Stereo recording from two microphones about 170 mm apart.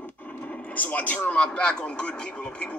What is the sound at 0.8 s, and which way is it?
A man's voice, 10° left (ahead or behind).